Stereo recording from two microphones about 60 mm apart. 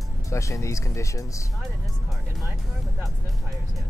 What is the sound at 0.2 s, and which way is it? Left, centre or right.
Speech, left.